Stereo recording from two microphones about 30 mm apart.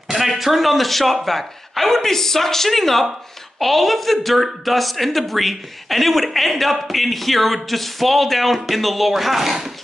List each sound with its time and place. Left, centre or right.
0.1 s a woman's voice: centre